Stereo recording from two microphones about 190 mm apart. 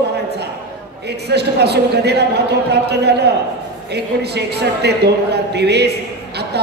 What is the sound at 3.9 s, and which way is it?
Speech, 60° right (ahead or behind).